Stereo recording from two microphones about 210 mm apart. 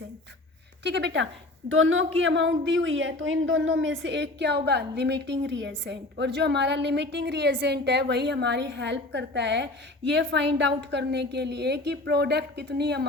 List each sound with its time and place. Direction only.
0.9 s speech: 55° right (ahead or behind)
1.7 s a woman's voice: 65° right (ahead or behind); by 13.1 s 50° right (ahead or behind)